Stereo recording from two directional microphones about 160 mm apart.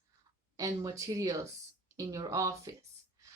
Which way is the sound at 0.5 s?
20° right (ahead or behind).